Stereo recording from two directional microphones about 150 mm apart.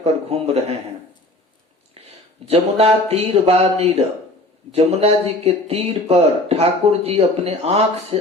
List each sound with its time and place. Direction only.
0.0 s speech: 45° right (ahead or behind)
2.0 s a sound: 40° right (ahead or behind)
2.5 s speech: 45° right (ahead or behind)